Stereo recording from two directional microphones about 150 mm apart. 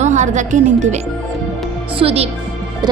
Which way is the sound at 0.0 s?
55° right (ahead or behind).